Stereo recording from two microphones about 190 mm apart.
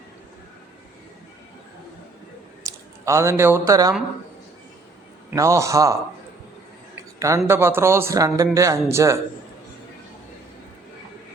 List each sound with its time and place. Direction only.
2.6 s a sound: 15° right (ahead or behind)
3.7 s speech: 20° right (ahead or behind)
5.3 s speech: 15° right (ahead or behind)
7.2 s speech: 15° right (ahead or behind)